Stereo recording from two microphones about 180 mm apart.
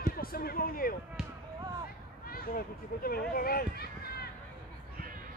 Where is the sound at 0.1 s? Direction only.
55° left (ahead or behind).